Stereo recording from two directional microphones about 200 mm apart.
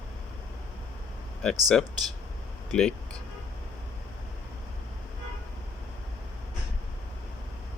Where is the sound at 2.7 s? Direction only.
5° left (ahead or behind).